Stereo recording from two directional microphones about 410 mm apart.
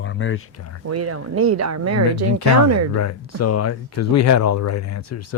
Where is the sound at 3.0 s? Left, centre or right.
Left.